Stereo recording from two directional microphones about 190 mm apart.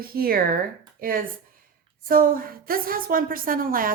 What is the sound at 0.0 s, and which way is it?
A woman's voice, 50° right (ahead or behind).